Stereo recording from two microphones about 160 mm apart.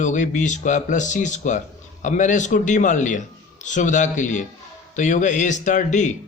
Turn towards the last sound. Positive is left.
turn(degrees=50)  # may be behind; listen again after turning